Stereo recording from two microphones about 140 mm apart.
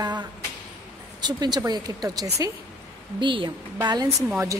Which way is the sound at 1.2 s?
30° right (ahead or behind).